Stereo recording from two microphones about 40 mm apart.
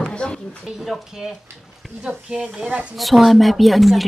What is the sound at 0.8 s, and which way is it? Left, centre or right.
Speech, centre.